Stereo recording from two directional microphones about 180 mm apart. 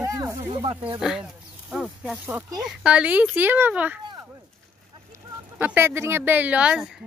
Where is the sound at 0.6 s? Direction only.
30° right (ahead or behind).